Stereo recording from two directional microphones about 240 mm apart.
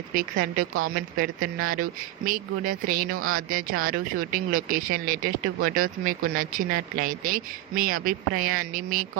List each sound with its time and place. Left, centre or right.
0.1 s speech: right
3.1 s speech: right
3.5 s speech: right